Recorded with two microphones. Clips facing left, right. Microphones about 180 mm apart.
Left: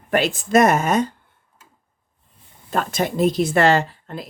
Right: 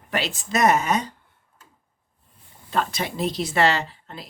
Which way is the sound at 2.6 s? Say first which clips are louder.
Left 4 dB; 45° left (ahead or behind).